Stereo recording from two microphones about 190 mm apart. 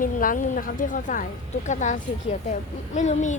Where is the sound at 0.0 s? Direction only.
45° left (ahead or behind).